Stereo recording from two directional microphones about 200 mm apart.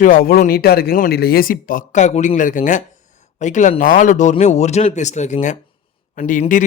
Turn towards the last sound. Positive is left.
turn(degrees=40)  # may be behind; listen again after turning